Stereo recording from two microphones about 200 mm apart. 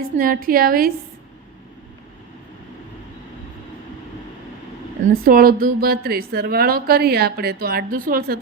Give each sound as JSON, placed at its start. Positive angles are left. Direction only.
{"t": 0.0, "sound": "a woman's voice", "side_deg": -45}
{"t": 5.1, "sound": "a woman's voice", "side_deg": -50}